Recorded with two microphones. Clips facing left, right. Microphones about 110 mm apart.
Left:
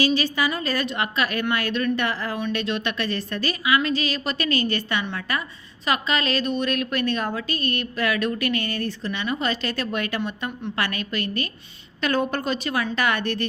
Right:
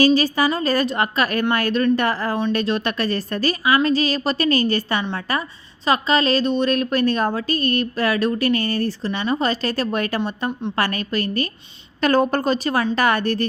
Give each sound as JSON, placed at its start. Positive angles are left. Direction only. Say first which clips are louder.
{"t": 0.0, "sound": "a woman's voice", "louder": "right 6 dB", "side_deg": -40}